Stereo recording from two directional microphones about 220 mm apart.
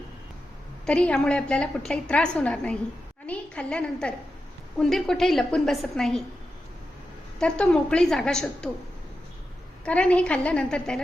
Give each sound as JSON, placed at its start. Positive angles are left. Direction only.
{"t": 0.9, "sound": "a woman's voice", "side_deg": 5}
{"t": 7.3, "sound": "a woman's voice", "side_deg": 5}
{"t": 9.8, "sound": "a woman's voice", "side_deg": 5}